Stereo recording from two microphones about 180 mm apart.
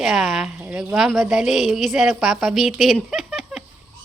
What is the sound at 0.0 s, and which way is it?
A woman's voice, centre (ahead or behind).